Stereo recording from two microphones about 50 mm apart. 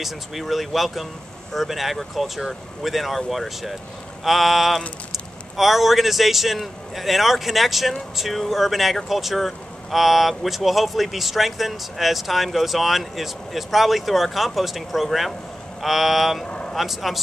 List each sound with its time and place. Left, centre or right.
0.0 s a man's voice: centre
16.4 s vehicle: left
16.7 s a man's voice: centre